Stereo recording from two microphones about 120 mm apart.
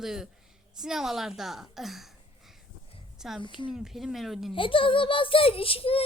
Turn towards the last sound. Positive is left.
turn(degrees=50)  # may be behind; listen again after turning